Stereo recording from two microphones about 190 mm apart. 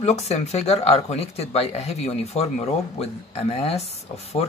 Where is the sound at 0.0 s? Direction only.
35° left (ahead or behind).